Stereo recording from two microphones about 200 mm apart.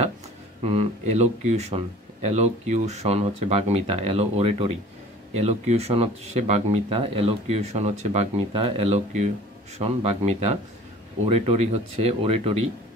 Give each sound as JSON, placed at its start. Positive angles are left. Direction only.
{"t": 0.6, "sound": "speech", "side_deg": -30}